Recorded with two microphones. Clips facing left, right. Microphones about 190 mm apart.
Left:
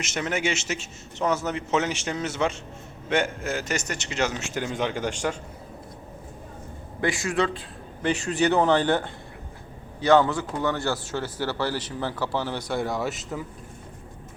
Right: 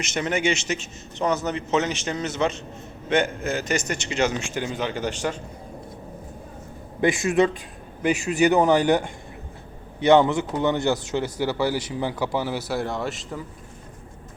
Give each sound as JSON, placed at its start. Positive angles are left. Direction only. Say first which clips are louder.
{"t": 0.0, "sound": "a man's voice", "louder": "right 3 dB", "side_deg": 5}
{"t": 4.6, "sound": "speech", "louder": "left 3 dB", "side_deg": -5}
{"t": 4.9, "sound": "a man's voice", "louder": "right 1 dB", "side_deg": 50}
{"t": 7.0, "sound": "a man's voice", "louder": "right 5 dB", "side_deg": -20}